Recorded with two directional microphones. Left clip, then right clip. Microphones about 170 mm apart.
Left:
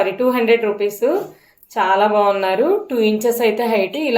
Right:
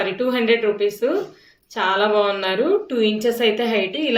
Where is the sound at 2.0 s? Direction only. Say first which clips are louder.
Left 4 dB; 25° left (ahead or behind).